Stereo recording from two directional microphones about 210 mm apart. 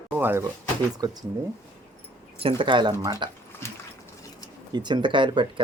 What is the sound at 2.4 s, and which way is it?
Speech, 25° right (ahead or behind).